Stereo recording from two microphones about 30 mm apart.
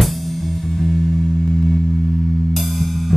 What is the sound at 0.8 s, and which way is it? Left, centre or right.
Music, centre.